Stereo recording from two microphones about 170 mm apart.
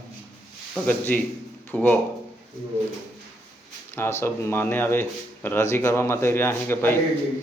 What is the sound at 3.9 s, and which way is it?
Speech, 15° left (ahead or behind).